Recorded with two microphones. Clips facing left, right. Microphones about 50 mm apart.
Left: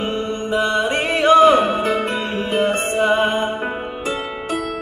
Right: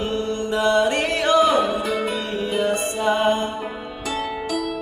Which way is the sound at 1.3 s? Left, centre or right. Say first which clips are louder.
Left 6 dB; left.